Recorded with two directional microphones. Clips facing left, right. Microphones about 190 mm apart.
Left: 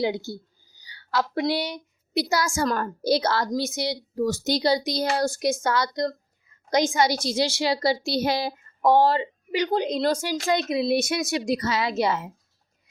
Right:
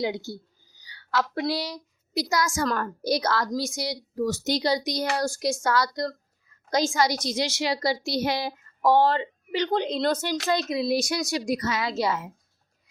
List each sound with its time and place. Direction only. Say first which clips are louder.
0.0 s speech: left 3 dB; 30° left (ahead or behind)
0.8 s a sound: left 1 dB; 30° left (ahead or behind)
1.4 s speech: left 3 dB; 25° left (ahead or behind)
8.9 s speech: left 1 dB; 10° left (ahead or behind)